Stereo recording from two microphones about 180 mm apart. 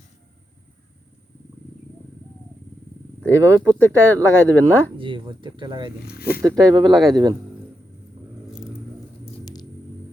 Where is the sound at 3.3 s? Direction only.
15° right (ahead or behind).